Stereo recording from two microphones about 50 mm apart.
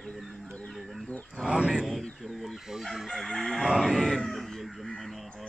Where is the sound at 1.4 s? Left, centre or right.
Centre.